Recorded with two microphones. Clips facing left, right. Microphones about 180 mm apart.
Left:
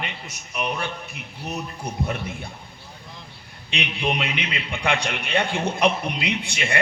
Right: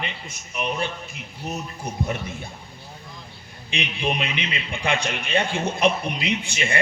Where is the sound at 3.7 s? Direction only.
60° left (ahead or behind).